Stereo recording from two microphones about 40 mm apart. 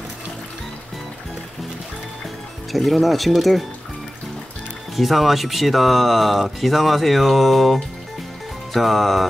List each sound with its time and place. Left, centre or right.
2.7 s speech: centre
4.9 s speech: centre